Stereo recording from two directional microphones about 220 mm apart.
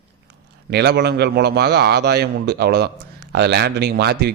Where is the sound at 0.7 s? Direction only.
50° right (ahead or behind).